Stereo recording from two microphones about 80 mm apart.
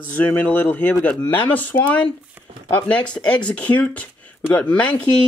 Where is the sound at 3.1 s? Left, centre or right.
Centre.